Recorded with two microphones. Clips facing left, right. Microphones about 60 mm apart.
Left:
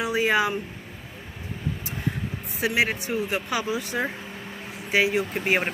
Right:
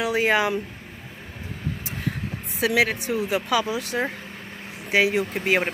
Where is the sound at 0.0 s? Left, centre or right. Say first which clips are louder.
Right 1 dB; right.